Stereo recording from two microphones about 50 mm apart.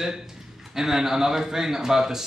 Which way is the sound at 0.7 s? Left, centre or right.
Centre.